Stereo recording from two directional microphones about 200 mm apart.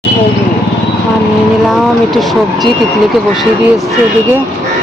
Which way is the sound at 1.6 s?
Centre (ahead or behind).